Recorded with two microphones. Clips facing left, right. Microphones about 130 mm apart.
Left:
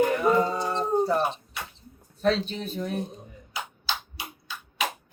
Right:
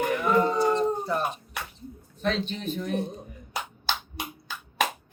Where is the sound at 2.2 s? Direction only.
35° left (ahead or behind).